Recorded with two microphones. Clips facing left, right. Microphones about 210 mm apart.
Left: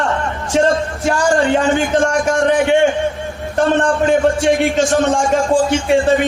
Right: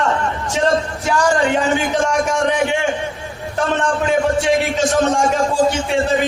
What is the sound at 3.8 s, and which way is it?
A man's voice, centre (ahead or behind).